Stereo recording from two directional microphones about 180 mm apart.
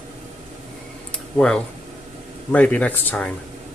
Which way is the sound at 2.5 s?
10° left (ahead or behind).